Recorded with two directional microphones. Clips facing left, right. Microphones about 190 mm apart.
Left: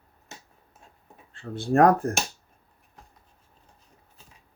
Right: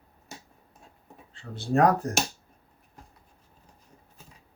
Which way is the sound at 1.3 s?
55° left (ahead or behind).